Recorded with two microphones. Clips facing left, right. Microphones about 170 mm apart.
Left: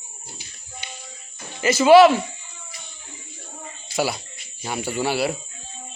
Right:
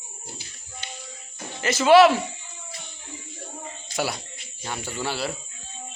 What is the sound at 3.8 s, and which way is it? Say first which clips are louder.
Speech: left 4 dB; 5° left (ahead or behind).